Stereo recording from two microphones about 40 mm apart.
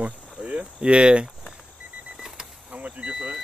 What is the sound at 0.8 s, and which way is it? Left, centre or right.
Speech, right.